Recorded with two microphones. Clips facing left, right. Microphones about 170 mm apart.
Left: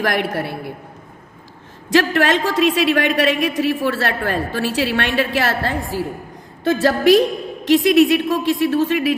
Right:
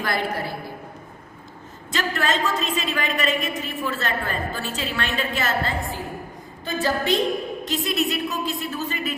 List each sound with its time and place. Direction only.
0.0 s a woman's voice: 80° left
1.9 s a woman's voice: 85° left